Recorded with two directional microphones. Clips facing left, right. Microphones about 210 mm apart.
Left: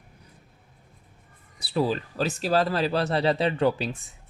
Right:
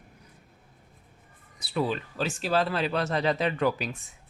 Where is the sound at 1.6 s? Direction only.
35° left (ahead or behind).